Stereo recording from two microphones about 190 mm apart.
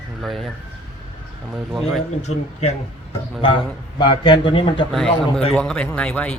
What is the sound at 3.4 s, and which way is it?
A man's voice, 25° left (ahead or behind).